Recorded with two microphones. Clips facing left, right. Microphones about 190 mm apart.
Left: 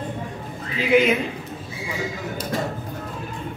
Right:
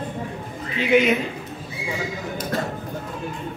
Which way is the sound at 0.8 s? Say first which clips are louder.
Even; centre (ahead or behind).